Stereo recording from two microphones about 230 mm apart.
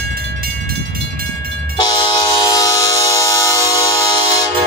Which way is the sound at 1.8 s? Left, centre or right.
Centre.